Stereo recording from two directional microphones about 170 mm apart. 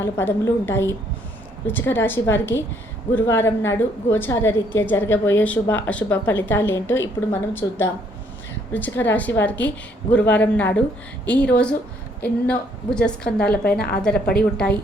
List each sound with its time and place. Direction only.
0.0 s a woman's voice: 15° left (ahead or behind)